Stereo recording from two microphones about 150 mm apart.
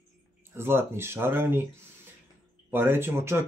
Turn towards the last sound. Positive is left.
turn(degrees=-15)  # may be behind; listen again after turning